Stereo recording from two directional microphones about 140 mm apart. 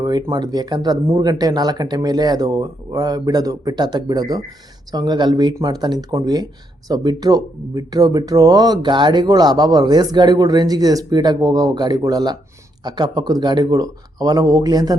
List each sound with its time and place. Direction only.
0.0 s speech: 30° right (ahead or behind)